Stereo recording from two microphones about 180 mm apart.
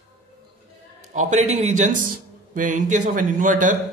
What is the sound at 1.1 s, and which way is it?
A man's voice, 40° right (ahead or behind).